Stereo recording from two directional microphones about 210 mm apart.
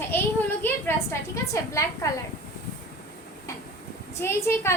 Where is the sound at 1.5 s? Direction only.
15° left (ahead or behind).